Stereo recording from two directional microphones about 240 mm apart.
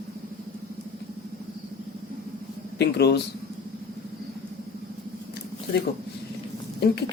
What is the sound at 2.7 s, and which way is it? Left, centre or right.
Speech, left.